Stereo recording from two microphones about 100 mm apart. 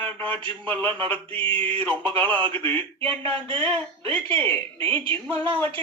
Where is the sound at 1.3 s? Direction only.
60° right (ahead or behind).